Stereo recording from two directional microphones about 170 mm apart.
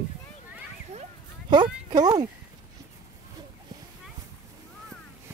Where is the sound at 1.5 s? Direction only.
25° right (ahead or behind).